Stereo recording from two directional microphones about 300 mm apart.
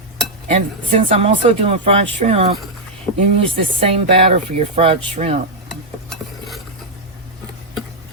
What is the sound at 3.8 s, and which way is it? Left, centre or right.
Speech, centre.